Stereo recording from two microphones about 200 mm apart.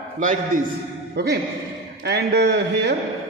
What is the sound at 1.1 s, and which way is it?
A man's voice, 55° right (ahead or behind).